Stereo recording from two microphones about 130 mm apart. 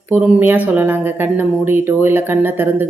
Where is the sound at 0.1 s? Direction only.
10° right (ahead or behind).